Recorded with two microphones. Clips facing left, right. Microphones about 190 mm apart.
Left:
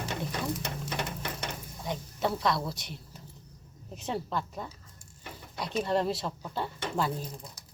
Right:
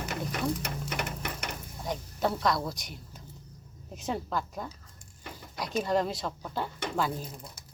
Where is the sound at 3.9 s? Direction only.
Centre (ahead or behind).